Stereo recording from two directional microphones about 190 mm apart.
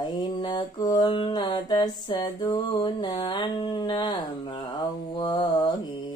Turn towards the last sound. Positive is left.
turn(degrees=25)  # may be behind; listen again after turning